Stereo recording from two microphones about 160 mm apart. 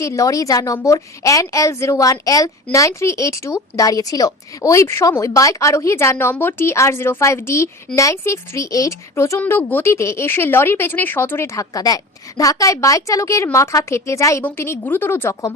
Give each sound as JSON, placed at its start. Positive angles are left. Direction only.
{"t": 0.0, "sound": "a woman's voice", "side_deg": 20}